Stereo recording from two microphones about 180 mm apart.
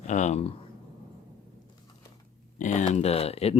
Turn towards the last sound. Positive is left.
turn(degrees=35)  # may be behind; listen again after turning